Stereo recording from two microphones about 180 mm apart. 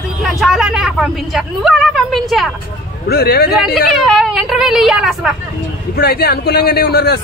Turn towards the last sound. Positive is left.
turn(degrees=65)  # may be behind; listen again after turning